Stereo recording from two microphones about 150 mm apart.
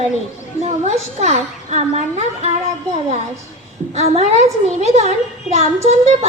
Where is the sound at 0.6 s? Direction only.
50° right (ahead or behind).